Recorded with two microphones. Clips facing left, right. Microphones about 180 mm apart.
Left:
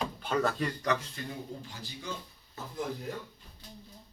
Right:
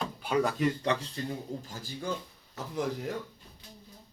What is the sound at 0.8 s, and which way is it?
Speech, 30° right (ahead or behind).